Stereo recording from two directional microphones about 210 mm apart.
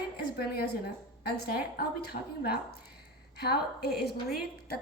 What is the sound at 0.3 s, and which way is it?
A woman's voice, 50° left (ahead or behind).